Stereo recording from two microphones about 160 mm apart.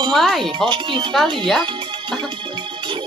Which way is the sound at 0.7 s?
30° right (ahead or behind).